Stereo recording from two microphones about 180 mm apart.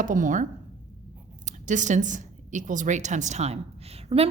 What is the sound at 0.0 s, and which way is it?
Speech, 45° right (ahead or behind).